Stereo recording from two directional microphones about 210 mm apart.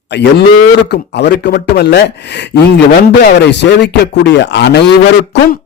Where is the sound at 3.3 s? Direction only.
55° left (ahead or behind).